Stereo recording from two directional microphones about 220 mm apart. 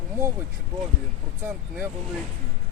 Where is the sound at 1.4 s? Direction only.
10° right (ahead or behind).